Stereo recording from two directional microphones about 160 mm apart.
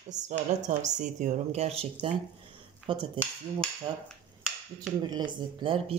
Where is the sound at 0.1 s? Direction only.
50° right (ahead or behind); by 4.0 s 30° right (ahead or behind).